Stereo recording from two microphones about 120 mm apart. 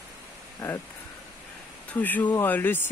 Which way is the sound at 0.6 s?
15° left (ahead or behind).